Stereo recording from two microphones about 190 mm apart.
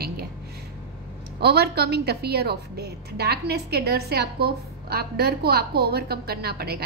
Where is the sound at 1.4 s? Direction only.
55° right (ahead or behind).